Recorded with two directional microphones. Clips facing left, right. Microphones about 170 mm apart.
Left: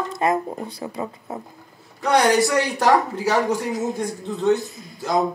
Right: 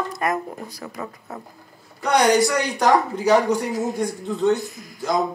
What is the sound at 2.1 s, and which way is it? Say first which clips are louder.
A man's voice: even; 5° left (ahead or behind).